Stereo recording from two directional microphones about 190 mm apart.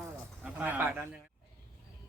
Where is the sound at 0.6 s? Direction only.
10° right (ahead or behind).